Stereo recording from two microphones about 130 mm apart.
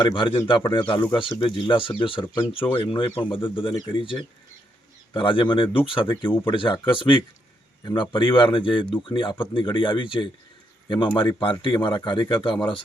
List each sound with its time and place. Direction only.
0.0 s speech: 40° left (ahead or behind)